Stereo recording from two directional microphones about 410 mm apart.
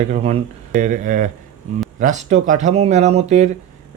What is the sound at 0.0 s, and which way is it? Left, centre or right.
A man's voice, centre.